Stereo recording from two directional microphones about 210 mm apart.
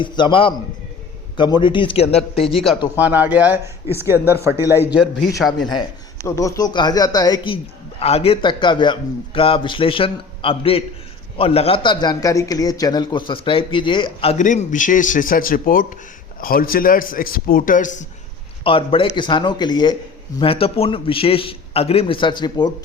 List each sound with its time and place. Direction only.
0.0 s a man's voice: 25° left (ahead or behind)
2.5 s speech: centre (ahead or behind)
5.4 s speech: centre (ahead or behind)
6.2 s a man's voice: 15° left (ahead or behind); by 18.0 s 40° left (ahead or behind)
18.6 s a man's voice: 25° left (ahead or behind)